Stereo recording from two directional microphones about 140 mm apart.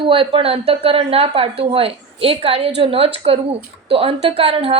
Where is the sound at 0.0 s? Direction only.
40° right (ahead or behind).